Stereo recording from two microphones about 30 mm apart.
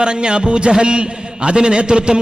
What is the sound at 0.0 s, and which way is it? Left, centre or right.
A man's voice, right.